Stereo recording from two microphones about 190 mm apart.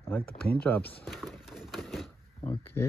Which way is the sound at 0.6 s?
10° left (ahead or behind).